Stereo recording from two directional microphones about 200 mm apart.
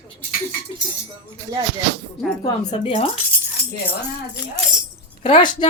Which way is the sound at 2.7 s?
30° left (ahead or behind).